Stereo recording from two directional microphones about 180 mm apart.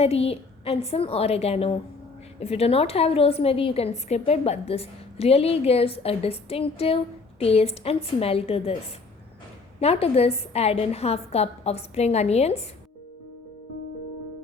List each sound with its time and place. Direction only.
0.0 s a woman's voice: 35° left (ahead or behind)
9.8 s a woman's voice: 35° left (ahead or behind)